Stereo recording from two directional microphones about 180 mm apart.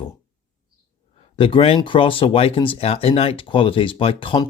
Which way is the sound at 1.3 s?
30° left (ahead or behind).